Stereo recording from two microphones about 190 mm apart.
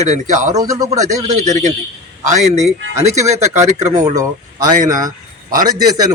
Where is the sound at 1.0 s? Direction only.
40° right (ahead or behind).